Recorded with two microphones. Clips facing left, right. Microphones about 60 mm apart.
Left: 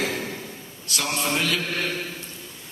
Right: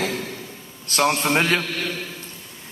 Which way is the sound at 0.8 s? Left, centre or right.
Right.